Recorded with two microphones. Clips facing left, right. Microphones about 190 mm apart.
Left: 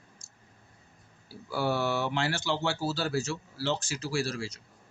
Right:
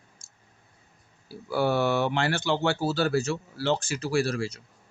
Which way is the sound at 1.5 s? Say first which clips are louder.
Right 5 dB; 60° right (ahead or behind).